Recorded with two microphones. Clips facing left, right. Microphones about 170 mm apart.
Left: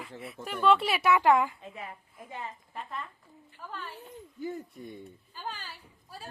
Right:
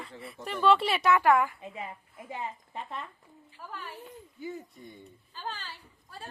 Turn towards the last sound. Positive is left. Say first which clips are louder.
# right 1 dB
turn(degrees=10)  # may be behind; listen again after turning